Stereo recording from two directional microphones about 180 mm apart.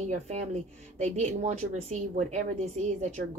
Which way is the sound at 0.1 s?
40° right (ahead or behind).